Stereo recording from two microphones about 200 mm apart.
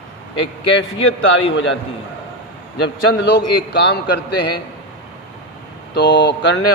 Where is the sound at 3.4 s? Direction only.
55° left (ahead or behind).